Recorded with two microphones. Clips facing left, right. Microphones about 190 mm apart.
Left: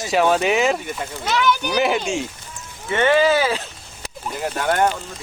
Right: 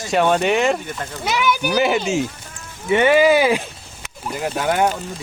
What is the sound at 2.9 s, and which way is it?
Speech, 15° right (ahead or behind).